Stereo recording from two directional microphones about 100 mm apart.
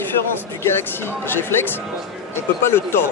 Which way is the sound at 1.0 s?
25° left (ahead or behind).